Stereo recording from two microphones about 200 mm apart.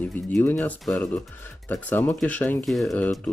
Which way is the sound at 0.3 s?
5° left (ahead or behind).